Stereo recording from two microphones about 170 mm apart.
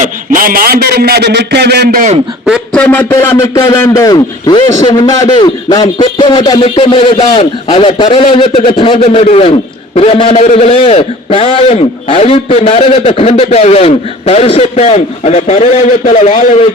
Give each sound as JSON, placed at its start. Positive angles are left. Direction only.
{"t": 0.0, "sound": "a man's voice", "side_deg": -55}
{"t": 2.7, "sound": "a man's voice", "side_deg": 10}